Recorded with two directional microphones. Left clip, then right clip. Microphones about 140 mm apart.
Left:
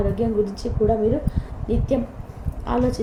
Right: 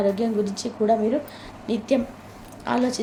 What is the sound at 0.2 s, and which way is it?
Speech, 25° right (ahead or behind).